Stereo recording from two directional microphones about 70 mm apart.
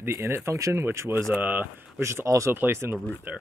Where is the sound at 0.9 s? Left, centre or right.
Right.